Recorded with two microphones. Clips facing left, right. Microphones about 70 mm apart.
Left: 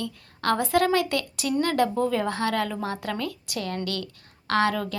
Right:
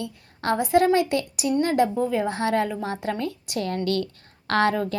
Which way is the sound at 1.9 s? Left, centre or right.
Centre.